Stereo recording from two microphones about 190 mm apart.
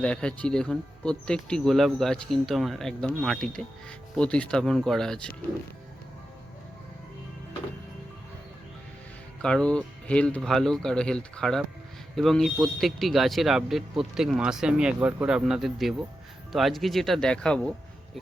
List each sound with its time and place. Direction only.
0.0 s speech: 5° left (ahead or behind)
9.4 s speech: 5° left (ahead or behind)